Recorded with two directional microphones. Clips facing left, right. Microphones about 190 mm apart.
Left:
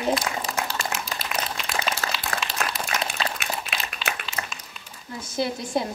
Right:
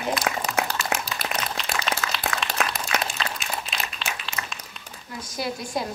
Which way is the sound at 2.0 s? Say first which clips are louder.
Even; 40° left (ahead or behind).